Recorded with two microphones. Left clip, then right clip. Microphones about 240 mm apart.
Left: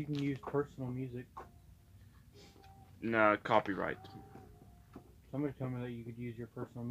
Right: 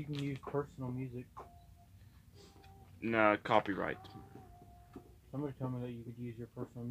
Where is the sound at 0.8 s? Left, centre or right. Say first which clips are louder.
Left 1 dB; left.